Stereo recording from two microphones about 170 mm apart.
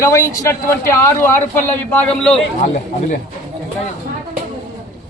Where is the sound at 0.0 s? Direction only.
20° left (ahead or behind).